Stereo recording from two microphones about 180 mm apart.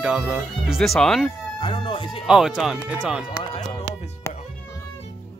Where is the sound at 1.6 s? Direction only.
30° left (ahead or behind).